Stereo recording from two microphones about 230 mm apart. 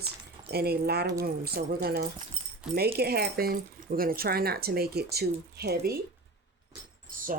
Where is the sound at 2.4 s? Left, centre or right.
Right.